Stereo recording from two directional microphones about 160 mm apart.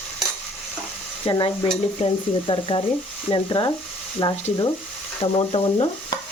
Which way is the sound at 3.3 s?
30° left (ahead or behind).